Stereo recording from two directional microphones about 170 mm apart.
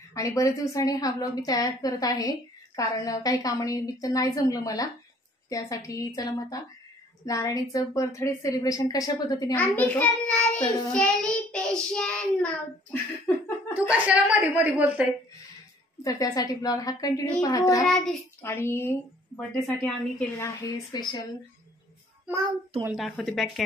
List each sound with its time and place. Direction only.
0.1 s a woman's voice: 20° left (ahead or behind)
9.6 s a child's voice: 10° left (ahead or behind)
10.9 s child singing: 5° left (ahead or behind)
13.7 s a woman's voice: 10° right (ahead or behind)
16.0 s a woman's voice: 20° left (ahead or behind)
17.8 s child singing: 5° left (ahead or behind)
18.4 s a woman's voice: 15° left (ahead or behind)
19.6 s child singing: 5° left (ahead or behind)
20.6 s a woman's voice: 25° left (ahead or behind)
22.9 s child singing: centre (ahead or behind)